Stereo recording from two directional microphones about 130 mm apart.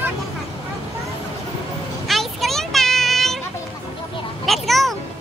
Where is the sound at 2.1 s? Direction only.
Centre (ahead or behind).